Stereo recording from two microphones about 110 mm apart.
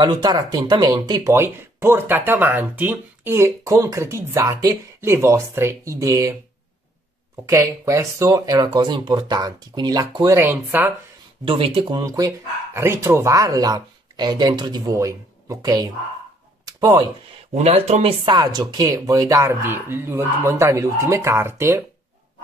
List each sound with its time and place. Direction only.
0.0 s speech: 40° right (ahead or behind)
1.3 s speech: 20° right (ahead or behind)
7.4 s speech: 25° right (ahead or behind)
10.3 s speech: 25° right (ahead or behind)
11.4 s speech: 50° right (ahead or behind); by 15.9 s 35° right (ahead or behind)
16.6 s a sound: 35° right (ahead or behind)
17.6 s speech: 85° right
18.2 s speech: 35° right (ahead or behind)